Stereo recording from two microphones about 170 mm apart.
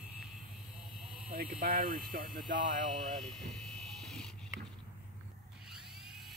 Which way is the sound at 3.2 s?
Centre (ahead or behind).